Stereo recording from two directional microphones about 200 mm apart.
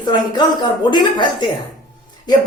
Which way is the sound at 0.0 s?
20° left (ahead or behind).